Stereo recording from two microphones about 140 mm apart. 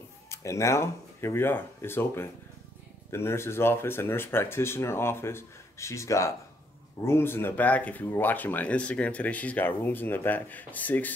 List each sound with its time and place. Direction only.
0.3 s speech: 20° left (ahead or behind)